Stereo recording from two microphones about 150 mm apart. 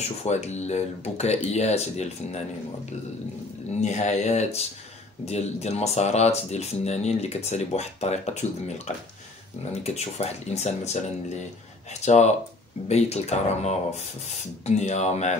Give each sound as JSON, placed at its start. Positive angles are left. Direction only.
{"t": 0.2, "sound": "speech", "side_deg": 50}
{"t": 3.8, "sound": "speech", "side_deg": 50}